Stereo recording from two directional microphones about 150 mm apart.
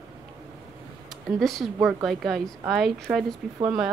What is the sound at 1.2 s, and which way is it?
Speech, centre (ahead or behind).